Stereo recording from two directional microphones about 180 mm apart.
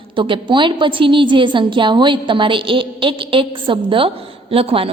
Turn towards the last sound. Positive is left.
turn(degrees=-30)  # may be behind; listen again after turning